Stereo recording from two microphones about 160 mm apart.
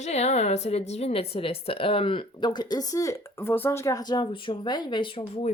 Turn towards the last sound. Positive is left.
turn(degrees=40)  # may be behind; listen again after turning